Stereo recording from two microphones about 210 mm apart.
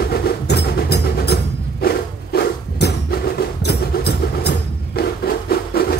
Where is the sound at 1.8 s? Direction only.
50° left (ahead or behind).